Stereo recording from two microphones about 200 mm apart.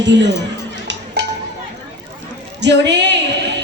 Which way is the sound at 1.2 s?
60° right (ahead or behind).